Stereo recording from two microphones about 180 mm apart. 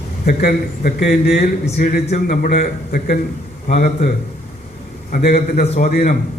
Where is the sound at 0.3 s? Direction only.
55° left (ahead or behind).